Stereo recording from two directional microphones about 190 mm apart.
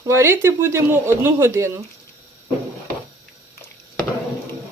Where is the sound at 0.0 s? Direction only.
15° right (ahead or behind).